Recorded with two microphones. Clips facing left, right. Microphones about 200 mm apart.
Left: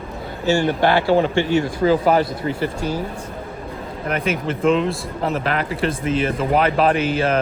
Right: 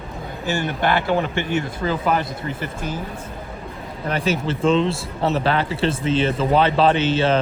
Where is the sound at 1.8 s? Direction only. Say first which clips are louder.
Left 9 dB; 35° left (ahead or behind).